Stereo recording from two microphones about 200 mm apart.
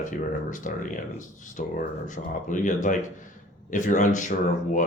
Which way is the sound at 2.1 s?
40° left (ahead or behind).